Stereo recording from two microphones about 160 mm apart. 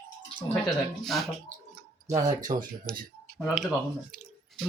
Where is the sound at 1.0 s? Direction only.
Centre (ahead or behind).